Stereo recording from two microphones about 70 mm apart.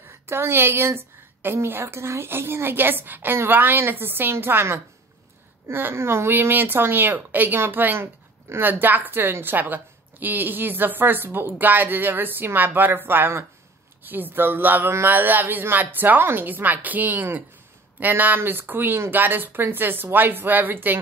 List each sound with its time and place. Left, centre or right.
0.3 s a woman's voice: right